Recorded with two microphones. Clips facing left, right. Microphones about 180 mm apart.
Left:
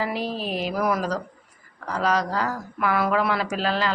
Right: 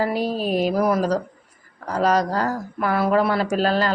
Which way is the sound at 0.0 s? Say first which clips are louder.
Right 5 dB; 40° right (ahead or behind).